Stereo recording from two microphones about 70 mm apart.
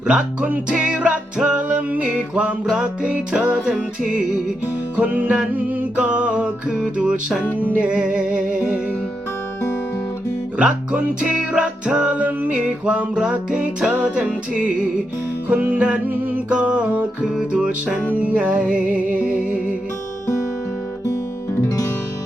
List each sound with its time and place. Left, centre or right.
0.1 s music: centre
4.9 s music: right
10.6 s music: centre
15.4 s music: right
21.7 s music: left